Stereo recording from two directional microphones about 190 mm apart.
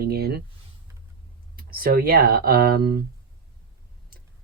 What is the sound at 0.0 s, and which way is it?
Speech, 55° right (ahead or behind).